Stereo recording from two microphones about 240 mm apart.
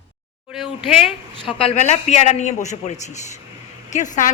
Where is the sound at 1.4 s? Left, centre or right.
Left.